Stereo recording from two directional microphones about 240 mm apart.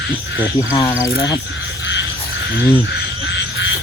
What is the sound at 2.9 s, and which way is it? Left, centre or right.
Frog, left.